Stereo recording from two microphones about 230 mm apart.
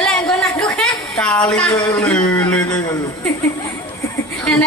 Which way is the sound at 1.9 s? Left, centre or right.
Centre.